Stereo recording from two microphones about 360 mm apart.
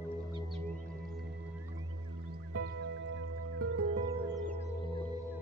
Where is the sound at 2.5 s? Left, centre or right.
Right.